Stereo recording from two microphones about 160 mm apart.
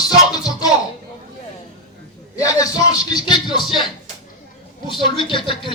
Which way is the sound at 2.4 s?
20° left (ahead or behind).